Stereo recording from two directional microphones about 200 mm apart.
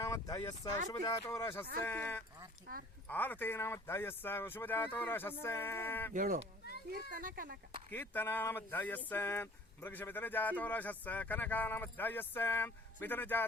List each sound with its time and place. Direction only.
0.0 s speech: 20° left (ahead or behind)
6.1 s speech: 40° right (ahead or behind)
7.9 s speech: 10° left (ahead or behind)